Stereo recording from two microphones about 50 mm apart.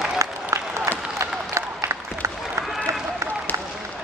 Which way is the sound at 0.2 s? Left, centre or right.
Right.